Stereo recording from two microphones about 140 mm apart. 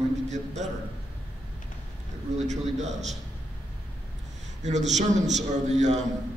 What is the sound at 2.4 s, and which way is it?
Speech, 55° right (ahead or behind).